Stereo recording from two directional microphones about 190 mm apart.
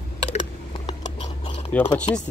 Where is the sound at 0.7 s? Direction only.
25° left (ahead or behind).